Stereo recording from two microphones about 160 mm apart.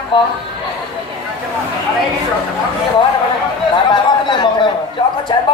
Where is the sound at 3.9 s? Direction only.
30° left (ahead or behind).